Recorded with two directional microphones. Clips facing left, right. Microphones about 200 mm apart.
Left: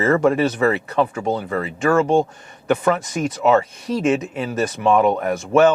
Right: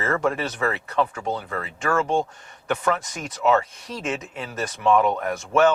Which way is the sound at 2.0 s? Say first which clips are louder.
Left 6 dB; 45° left (ahead or behind).